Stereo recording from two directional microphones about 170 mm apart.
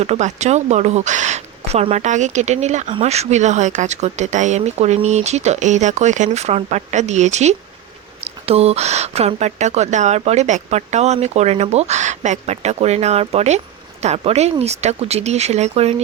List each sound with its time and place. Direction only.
0.0 s speech: 40° right (ahead or behind)